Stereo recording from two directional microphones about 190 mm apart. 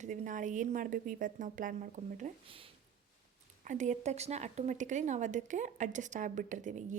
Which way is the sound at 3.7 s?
40° right (ahead or behind).